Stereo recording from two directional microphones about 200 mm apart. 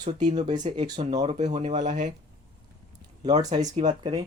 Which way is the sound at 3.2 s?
20° right (ahead or behind).